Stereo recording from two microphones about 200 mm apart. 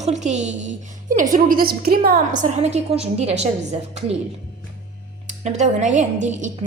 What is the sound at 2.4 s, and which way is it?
A woman's voice, 35° right (ahead or behind).